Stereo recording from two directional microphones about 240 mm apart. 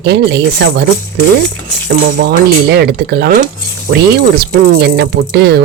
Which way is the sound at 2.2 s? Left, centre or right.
Right.